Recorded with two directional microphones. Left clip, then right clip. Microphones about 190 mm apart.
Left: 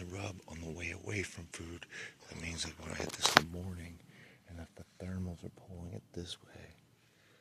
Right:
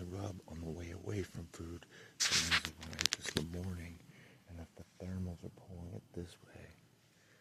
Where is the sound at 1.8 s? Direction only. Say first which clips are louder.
Left 10 dB; 15° right (ahead or behind).